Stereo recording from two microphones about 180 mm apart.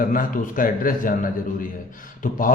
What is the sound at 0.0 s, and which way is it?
Speech, 50° left (ahead or behind).